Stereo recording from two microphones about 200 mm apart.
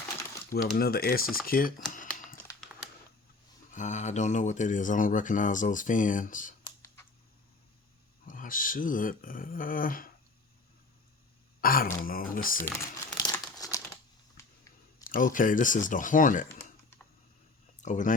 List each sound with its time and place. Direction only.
0.8 s speech: 50° left (ahead or behind)
1.9 s typing: 40° left (ahead or behind)
2.7 s a sound: 5° right (ahead or behind)
3.7 s speech: 40° left (ahead or behind)
6.7 s clicking: 15° left (ahead or behind)
8.3 s speech: 45° left (ahead or behind)
11.6 s speech: 45° left (ahead or behind)
12.6 s crumpling: 15° left (ahead or behind)
15.0 s speech: 40° left (ahead or behind)
17.7 s speech: 40° left (ahead or behind)